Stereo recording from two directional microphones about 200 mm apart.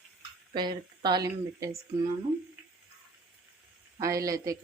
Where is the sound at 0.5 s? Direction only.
20° right (ahead or behind).